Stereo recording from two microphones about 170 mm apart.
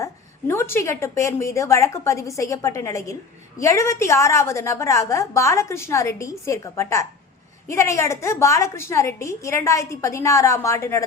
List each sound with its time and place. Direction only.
0.0 s a woman's voice: 15° left (ahead or behind)